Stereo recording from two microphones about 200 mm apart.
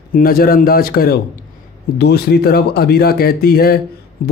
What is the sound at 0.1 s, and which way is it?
A man's voice, 45° left (ahead or behind).